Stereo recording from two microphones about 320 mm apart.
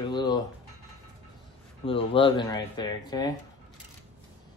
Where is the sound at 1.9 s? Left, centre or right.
Centre.